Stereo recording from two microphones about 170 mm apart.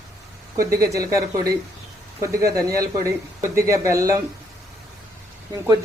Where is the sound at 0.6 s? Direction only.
20° right (ahead or behind).